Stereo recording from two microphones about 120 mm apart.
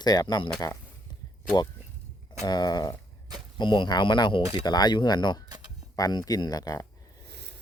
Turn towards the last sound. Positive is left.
turn(degrees=30)  # may be behind; listen again after turning